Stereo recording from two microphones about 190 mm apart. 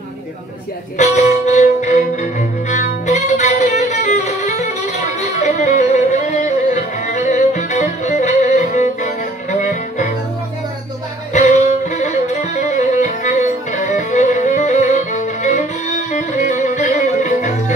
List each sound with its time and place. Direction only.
0.9 s music: 40° left (ahead or behind)
11.3 s music: 35° left (ahead or behind)